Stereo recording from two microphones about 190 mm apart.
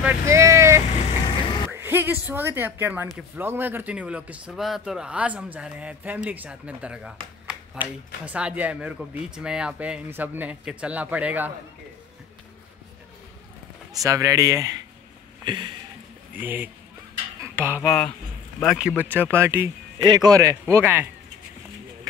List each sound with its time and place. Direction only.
0.0 s vehicle: 15° right (ahead or behind)
1.7 s a woman's voice: 10° right (ahead or behind)
13.9 s a woman's voice: 15° right (ahead or behind)
15.4 s a sound: 25° right (ahead or behind)
16.3 s a woman's voice: 10° right (ahead or behind)
17.4 s a sound: 10° right (ahead or behind)
18.6 s a man's voice: centre (ahead or behind)